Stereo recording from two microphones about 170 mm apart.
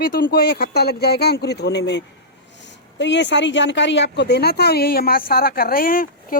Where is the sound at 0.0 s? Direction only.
60° left (ahead or behind).